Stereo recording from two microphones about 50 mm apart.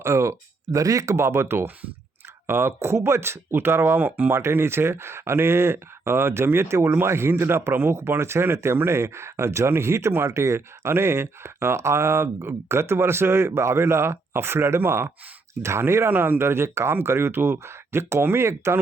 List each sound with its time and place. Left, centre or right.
0.0 s speech: right
4.4 s speech: right
10.3 s speech: right
14.8 s speech: right
16.0 s speech: right